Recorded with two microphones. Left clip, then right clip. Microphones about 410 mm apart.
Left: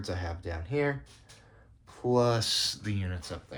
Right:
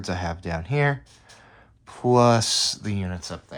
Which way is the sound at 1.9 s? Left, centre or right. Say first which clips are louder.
Right 8 dB; centre.